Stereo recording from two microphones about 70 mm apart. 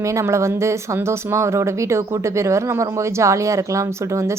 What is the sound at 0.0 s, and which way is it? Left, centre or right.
Speech, right.